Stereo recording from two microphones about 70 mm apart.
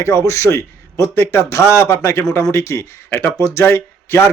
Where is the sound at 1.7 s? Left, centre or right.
Left.